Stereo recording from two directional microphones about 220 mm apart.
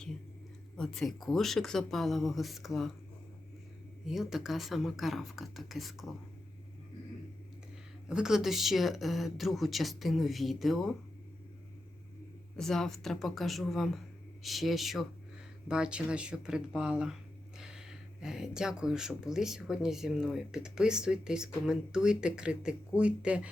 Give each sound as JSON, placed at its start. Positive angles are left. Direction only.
{"t": 0.8, "sound": "speech", "side_deg": 0}
{"t": 4.0, "sound": "speech", "side_deg": 0}
{"t": 8.0, "sound": "speech", "side_deg": -5}
{"t": 12.5, "sound": "speech", "side_deg": 0}